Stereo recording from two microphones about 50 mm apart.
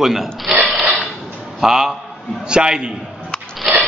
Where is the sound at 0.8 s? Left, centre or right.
Centre.